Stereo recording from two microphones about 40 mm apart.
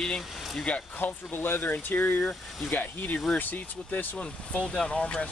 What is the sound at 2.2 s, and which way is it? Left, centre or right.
Speech, centre.